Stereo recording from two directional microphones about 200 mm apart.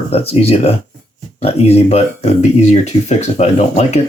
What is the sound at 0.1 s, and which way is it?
Speech, 30° left (ahead or behind).